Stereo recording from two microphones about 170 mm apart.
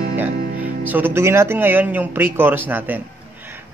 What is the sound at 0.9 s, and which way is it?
Music, 15° right (ahead or behind).